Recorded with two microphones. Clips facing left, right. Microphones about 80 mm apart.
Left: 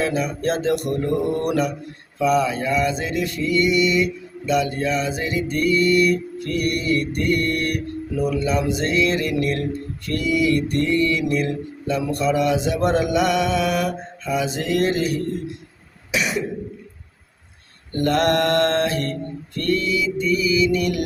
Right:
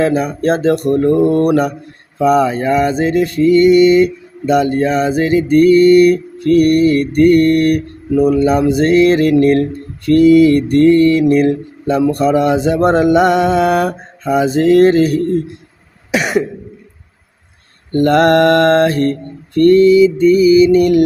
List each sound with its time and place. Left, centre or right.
0.0 s mantra: right
16.1 s cough: right
17.9 s mantra: right